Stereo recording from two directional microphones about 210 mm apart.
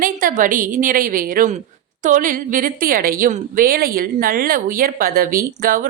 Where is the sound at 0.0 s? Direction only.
40° right (ahead or behind).